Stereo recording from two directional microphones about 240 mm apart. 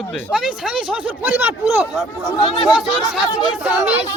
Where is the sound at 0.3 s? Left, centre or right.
Centre.